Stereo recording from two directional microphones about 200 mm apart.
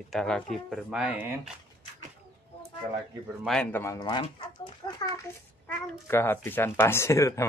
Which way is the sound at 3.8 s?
20° left (ahead or behind).